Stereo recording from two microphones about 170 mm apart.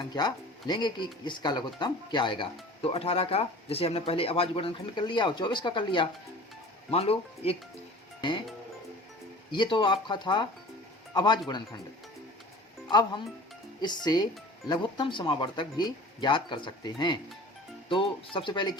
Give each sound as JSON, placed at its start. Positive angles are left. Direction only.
{"t": 0.1, "sound": "speech", "side_deg": 25}
{"t": 8.2, "sound": "music", "side_deg": 25}
{"t": 9.5, "sound": "speech", "side_deg": 30}
{"t": 12.9, "sound": "speech", "side_deg": 25}